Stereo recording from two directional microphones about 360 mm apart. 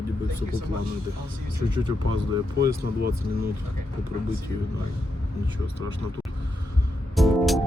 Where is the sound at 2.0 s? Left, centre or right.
Right.